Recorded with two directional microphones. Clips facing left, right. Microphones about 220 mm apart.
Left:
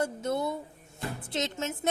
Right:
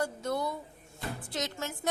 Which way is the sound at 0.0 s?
25° left (ahead or behind).